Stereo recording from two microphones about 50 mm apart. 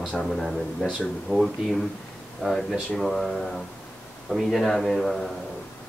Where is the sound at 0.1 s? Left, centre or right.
Centre.